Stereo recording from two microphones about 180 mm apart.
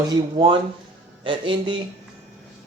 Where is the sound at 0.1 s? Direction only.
30° right (ahead or behind).